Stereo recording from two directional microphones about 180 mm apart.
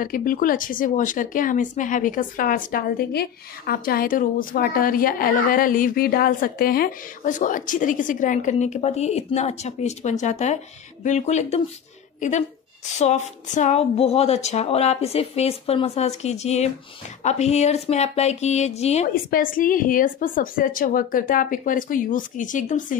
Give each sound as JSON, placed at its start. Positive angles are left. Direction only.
{"t": 0.0, "sound": "a woman's voice", "side_deg": 50}
{"t": 19.3, "sound": "speech", "side_deg": 50}